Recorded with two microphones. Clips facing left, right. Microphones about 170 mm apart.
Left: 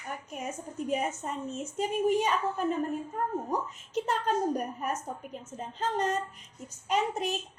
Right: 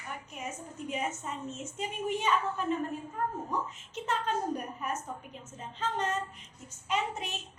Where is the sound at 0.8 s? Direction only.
40° left (ahead or behind).